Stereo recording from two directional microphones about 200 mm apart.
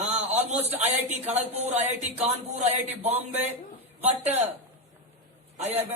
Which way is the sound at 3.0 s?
30° right (ahead or behind).